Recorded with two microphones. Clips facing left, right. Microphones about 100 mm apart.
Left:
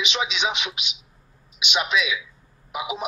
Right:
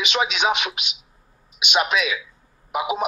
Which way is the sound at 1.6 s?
50° right (ahead or behind).